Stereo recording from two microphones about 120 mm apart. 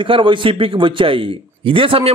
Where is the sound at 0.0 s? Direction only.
45° right (ahead or behind).